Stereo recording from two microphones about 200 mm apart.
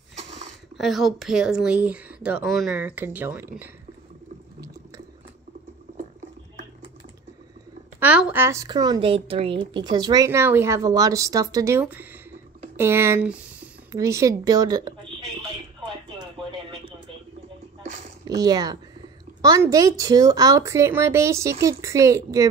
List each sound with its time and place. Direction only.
0.7 s speech: centre (ahead or behind)
8.0 s a woman's voice: 5° right (ahead or behind)
18.2 s a woman's voice: 20° right (ahead or behind)